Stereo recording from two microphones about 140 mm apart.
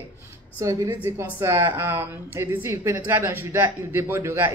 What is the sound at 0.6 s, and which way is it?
A woman's voice, 25° right (ahead or behind).